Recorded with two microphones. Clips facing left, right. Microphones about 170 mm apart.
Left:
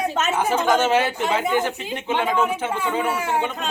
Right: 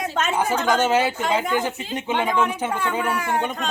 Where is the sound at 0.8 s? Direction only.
15° right (ahead or behind).